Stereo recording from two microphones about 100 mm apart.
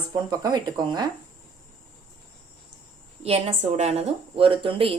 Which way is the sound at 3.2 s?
90° right.